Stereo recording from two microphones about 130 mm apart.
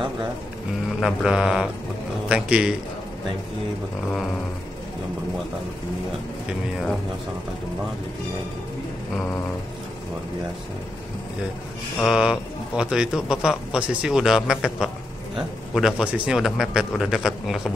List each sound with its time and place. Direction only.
0.8 s a man's voice: centre (ahead or behind)
12.0 s speech: 5° right (ahead or behind)